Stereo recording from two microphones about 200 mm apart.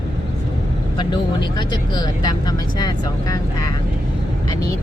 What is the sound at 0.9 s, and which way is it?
Speech, 20° left (ahead or behind).